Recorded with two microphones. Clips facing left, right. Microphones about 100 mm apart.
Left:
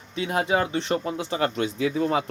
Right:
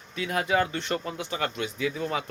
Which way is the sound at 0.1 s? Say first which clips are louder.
Left 3 dB; 25° left (ahead or behind).